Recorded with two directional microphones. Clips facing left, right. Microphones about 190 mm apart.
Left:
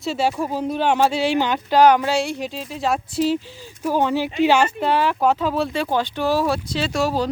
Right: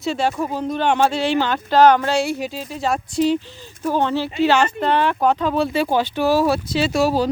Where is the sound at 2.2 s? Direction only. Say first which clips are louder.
Right 2 dB; 5° right (ahead or behind).